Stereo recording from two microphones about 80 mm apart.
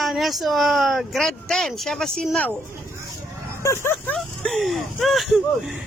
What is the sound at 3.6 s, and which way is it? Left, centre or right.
Speech, left.